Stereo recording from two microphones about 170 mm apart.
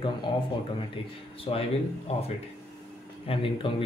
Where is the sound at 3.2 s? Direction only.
30° left (ahead or behind).